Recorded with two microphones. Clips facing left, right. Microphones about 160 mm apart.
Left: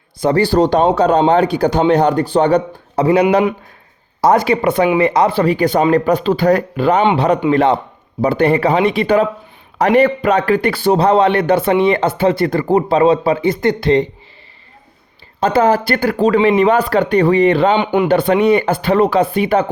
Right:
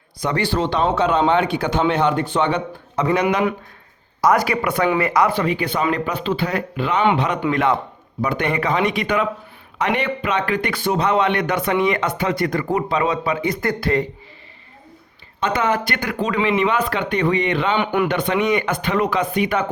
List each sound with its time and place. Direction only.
0.2 s a man's voice: 35° left (ahead or behind)
15.4 s a man's voice: 35° left (ahead or behind)
17.7 s speech: 20° left (ahead or behind)
18.1 s a man's voice: 35° left (ahead or behind)